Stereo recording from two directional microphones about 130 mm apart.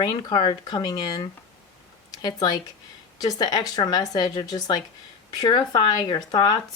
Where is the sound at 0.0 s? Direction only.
35° left (ahead or behind).